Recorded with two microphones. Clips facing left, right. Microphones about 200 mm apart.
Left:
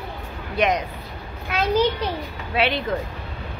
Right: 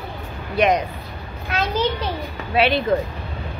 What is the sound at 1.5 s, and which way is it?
Speech, 10° left (ahead or behind).